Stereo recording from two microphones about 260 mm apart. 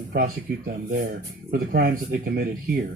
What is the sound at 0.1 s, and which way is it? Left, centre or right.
Speech, right.